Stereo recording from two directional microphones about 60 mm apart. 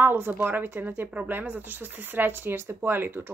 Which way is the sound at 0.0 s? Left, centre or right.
Right.